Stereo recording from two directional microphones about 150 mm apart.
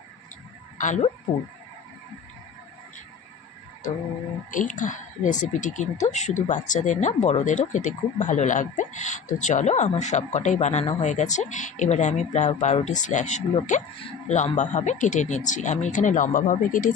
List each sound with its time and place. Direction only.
0.8 s speech: 55° left (ahead or behind)
4.5 s speech: 60° left (ahead or behind)